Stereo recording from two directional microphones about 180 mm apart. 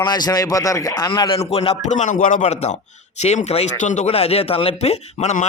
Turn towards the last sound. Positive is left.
turn(degrees=40)  # may be behind; listen again after turning